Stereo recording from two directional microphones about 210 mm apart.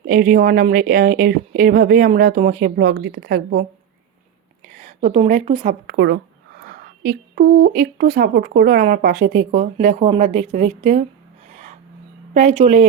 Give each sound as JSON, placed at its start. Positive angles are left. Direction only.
{"t": 0.1, "sound": "speech", "side_deg": -40}
{"t": 4.8, "sound": "a woman's voice", "side_deg": -35}
{"t": 5.9, "sound": "speech", "side_deg": -60}
{"t": 6.7, "sound": "speech", "side_deg": -45}
{"t": 12.3, "sound": "speech", "side_deg": -35}